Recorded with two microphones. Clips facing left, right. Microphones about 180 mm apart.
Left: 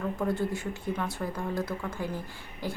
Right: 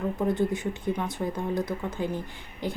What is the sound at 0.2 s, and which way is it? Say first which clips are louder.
A woman's voice: right 5 dB; 20° right (ahead or behind).